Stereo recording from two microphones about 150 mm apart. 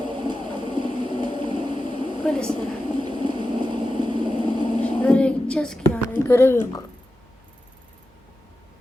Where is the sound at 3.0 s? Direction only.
30° right (ahead or behind).